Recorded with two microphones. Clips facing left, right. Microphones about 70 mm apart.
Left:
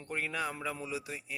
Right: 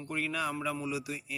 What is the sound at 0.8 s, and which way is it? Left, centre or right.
Speech, left.